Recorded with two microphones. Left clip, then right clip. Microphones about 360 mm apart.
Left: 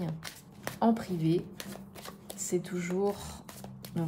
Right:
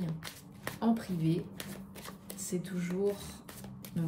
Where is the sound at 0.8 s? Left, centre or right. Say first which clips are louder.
Left 5 dB; left.